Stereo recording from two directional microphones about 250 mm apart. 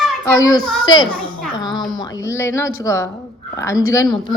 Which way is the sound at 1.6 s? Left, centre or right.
Centre.